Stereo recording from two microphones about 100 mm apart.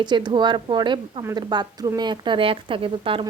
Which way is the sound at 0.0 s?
45° right (ahead or behind).